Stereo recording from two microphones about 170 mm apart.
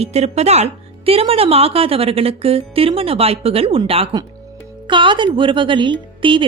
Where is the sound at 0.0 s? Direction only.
40° right (ahead or behind).